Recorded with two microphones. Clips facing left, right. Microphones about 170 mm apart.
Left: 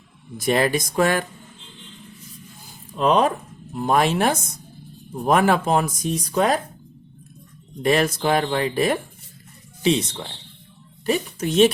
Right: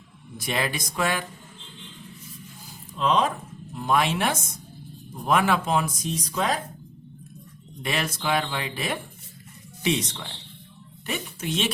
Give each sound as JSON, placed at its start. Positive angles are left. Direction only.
{"t": 0.3, "sound": "speech", "side_deg": 45}
{"t": 3.0, "sound": "speech", "side_deg": 55}
{"t": 3.8, "sound": "speech", "side_deg": 45}
{"t": 7.8, "sound": "speech", "side_deg": 45}
{"t": 9.8, "sound": "speech", "side_deg": 30}